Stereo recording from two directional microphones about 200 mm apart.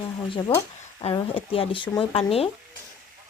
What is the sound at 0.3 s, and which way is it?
Speech, 25° left (ahead or behind).